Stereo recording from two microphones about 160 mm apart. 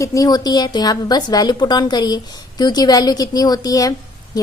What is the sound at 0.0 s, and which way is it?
A woman's voice, 20° left (ahead or behind).